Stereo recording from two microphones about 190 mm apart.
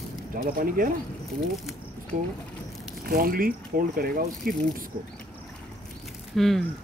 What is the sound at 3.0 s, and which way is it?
Speech, 50° right (ahead or behind).